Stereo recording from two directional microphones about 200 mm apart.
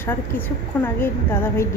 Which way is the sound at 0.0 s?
10° left (ahead or behind).